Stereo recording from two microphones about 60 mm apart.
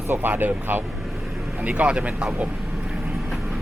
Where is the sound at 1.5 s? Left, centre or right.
Right.